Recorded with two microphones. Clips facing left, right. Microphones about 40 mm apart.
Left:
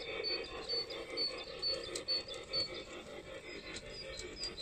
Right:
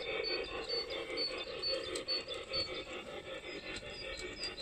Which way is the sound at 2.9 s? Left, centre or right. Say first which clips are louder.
Right 3 dB; right.